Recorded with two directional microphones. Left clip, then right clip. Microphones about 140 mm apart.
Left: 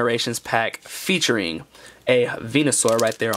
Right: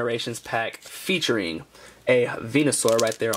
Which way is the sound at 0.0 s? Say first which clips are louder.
Left 5 dB; 40° left (ahead or behind).